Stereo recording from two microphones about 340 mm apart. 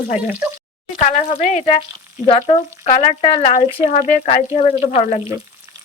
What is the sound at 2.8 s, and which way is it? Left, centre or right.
Speech, left.